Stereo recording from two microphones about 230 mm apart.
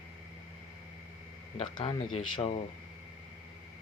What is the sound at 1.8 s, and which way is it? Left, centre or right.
Speech, left.